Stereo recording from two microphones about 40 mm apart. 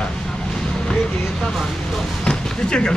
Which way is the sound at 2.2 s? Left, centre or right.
Centre.